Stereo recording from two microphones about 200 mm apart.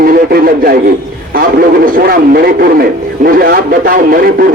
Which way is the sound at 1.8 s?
50° right (ahead or behind).